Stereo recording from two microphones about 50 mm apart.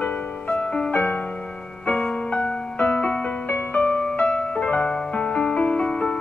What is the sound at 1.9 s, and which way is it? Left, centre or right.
Music, left.